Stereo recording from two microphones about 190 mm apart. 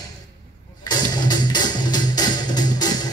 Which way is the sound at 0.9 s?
20° left (ahead or behind).